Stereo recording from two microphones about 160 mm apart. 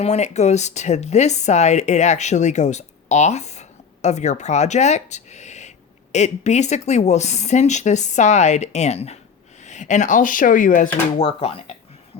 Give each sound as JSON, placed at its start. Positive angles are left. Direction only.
{"t": 0.0, "sound": "speech", "side_deg": 45}
{"t": 11.2, "sound": "speech", "side_deg": 35}